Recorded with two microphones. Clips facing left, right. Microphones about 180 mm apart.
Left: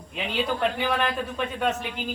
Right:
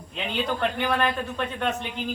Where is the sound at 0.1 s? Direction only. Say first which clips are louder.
Left 1 dB; 5° left (ahead or behind).